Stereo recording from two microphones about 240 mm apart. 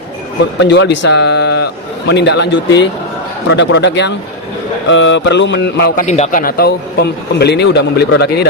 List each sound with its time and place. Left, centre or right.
0.6 s a man's voice: left
6.1 s a man's voice: left